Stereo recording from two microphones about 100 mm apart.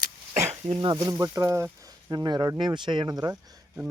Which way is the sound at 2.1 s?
45° right (ahead or behind).